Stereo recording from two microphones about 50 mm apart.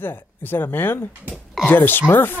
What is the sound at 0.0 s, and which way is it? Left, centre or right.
Speech, left.